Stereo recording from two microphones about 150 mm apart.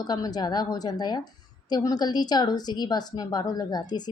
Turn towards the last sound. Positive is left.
turn(degrees=30)  # may be behind; listen again after turning